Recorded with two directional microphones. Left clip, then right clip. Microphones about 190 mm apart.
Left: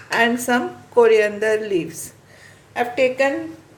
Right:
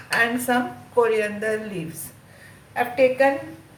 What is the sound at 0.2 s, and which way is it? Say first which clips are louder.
Speech: left 3 dB; 45° left (ahead or behind).